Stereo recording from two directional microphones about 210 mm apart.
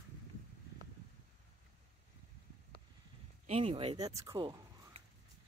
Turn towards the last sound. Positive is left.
turn(degrees=-20)  # may be behind; listen again after turning